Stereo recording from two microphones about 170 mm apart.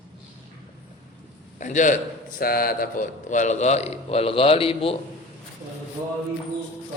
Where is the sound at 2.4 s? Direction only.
60° left (ahead or behind); by 5.0 s 35° left (ahead or behind).